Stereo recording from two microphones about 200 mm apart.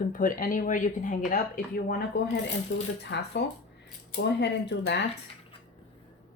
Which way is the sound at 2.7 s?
65° left (ahead or behind).